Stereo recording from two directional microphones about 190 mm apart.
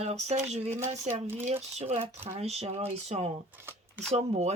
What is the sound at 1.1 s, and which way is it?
Speech, 10° right (ahead or behind).